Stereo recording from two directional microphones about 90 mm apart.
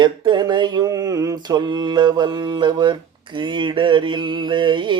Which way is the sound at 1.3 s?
50° right (ahead or behind).